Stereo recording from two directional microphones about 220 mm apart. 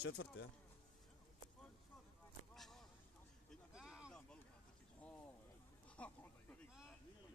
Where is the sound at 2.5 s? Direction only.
Centre (ahead or behind).